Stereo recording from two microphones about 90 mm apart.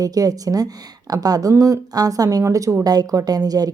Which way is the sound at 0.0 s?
45° right (ahead or behind).